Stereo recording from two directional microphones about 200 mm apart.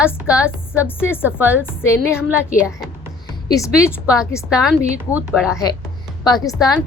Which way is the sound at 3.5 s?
15° left (ahead or behind).